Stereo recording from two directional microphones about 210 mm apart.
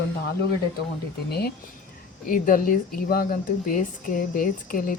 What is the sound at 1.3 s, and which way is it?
Speech, 50° left (ahead or behind).